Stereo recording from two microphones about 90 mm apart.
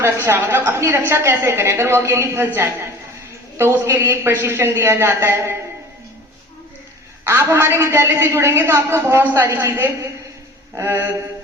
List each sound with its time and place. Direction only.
0.0 s a man's voice: 25° right (ahead or behind)
3.6 s a man's voice: 25° right (ahead or behind)
7.3 s a man's voice: 30° right (ahead or behind)